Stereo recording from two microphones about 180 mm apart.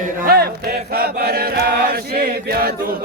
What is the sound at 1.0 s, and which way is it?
Choir, 60° right (ahead or behind).